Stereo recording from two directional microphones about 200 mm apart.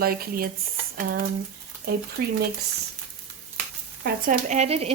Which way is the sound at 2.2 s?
55° right (ahead or behind).